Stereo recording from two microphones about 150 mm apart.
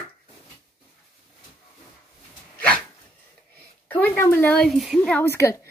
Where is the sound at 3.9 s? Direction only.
15° left (ahead or behind).